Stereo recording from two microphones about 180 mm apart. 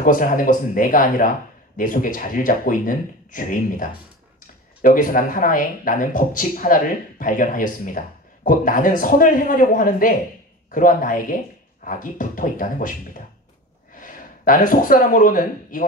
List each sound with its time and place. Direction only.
0.0 s speech: 50° left (ahead or behind)
13.9 s speech: 50° left (ahead or behind)